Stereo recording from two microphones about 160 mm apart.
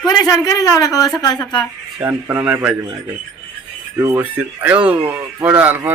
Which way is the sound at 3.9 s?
20° right (ahead or behind).